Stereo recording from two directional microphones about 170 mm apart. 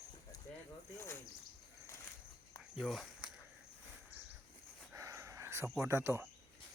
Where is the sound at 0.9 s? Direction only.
15° left (ahead or behind).